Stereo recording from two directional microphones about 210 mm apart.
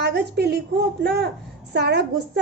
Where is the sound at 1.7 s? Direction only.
50° right (ahead or behind).